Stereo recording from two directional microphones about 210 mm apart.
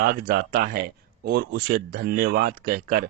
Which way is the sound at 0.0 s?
45° right (ahead or behind).